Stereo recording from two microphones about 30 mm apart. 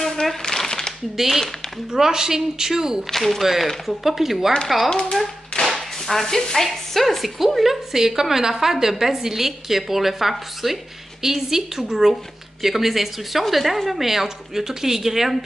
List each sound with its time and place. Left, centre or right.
0.0 s a sound: centre
1.1 s speech: centre
1.9 s speech: centre
3.1 s a woman's voice: centre
5.7 s whip: centre
6.2 s a woman's voice: centre